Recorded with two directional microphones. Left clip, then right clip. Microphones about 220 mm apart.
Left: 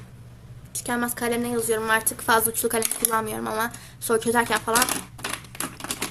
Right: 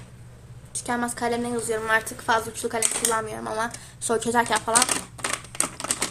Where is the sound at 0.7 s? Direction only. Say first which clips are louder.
Even; 15° left (ahead or behind).